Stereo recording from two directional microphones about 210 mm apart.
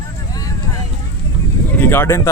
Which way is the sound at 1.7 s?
10° left (ahead or behind).